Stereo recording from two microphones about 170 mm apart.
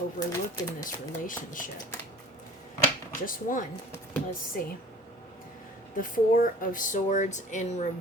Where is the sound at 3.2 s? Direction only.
50° left (ahead or behind).